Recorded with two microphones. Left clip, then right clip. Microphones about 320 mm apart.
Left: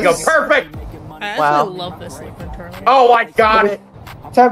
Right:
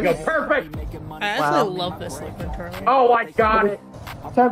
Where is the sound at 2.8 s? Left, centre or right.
Left.